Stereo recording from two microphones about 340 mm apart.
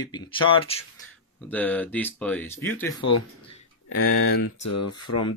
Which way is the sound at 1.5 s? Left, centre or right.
Centre.